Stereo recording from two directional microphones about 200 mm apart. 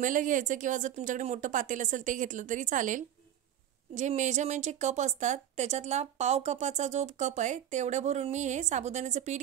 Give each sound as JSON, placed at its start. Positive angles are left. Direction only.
{"t": 0.0, "sound": "speech", "side_deg": -40}